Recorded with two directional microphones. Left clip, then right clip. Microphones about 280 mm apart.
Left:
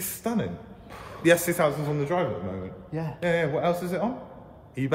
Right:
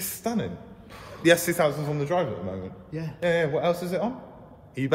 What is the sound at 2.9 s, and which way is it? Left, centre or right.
Speech, centre.